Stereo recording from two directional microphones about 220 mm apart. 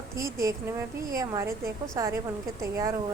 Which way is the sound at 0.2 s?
15° right (ahead or behind).